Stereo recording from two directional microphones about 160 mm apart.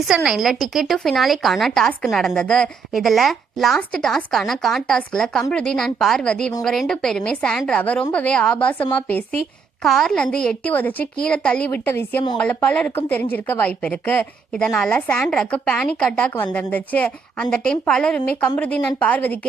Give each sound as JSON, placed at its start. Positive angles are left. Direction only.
{"t": 0.1, "sound": "a woman's voice", "side_deg": 0}